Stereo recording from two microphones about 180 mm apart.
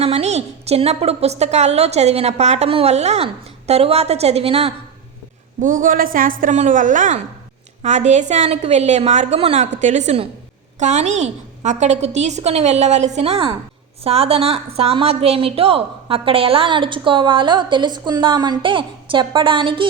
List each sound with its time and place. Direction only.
0.0 s a woman's voice: 35° right (ahead or behind)
5.6 s a woman's voice: 45° right (ahead or behind); by 19.9 s 30° right (ahead or behind)